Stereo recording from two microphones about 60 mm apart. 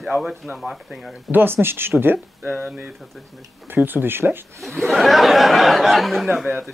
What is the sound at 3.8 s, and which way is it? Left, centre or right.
Speech, right.